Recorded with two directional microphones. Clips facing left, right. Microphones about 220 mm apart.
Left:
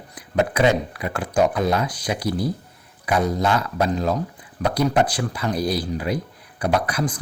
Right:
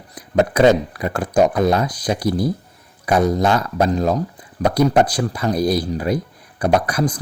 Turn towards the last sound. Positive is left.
turn(degrees=-40)  # may be behind; listen again after turning